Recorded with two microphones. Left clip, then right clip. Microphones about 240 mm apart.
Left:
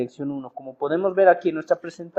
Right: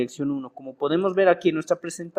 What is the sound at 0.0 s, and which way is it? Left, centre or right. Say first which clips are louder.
Speech: right 2 dB; right.